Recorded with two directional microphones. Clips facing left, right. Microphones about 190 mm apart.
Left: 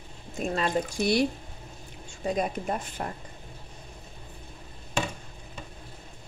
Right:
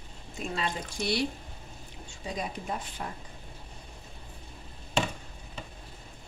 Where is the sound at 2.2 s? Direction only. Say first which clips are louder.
Left 7 dB; 55° left (ahead or behind).